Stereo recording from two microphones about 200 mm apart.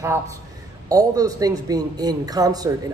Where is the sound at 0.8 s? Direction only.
20° right (ahead or behind).